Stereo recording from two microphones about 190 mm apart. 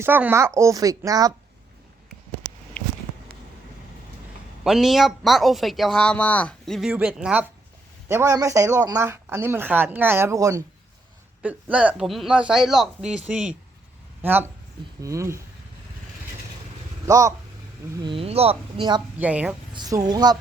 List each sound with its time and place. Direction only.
0.0 s speech: 10° right (ahead or behind)
4.6 s speech: centre (ahead or behind)
17.1 s speech: 15° right (ahead or behind)
19.2 s speech: 5° right (ahead or behind)
19.7 s speech: 20° right (ahead or behind)